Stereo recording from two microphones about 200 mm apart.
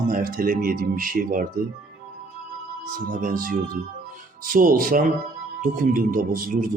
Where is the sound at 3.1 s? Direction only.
45° right (ahead or behind).